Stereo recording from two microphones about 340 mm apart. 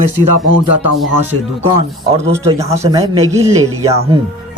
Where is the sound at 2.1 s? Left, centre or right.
Centre.